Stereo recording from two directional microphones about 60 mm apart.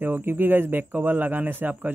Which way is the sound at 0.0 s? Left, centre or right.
Right.